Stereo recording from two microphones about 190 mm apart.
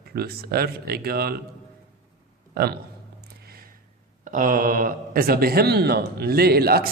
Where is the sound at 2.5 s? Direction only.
55° right (ahead or behind).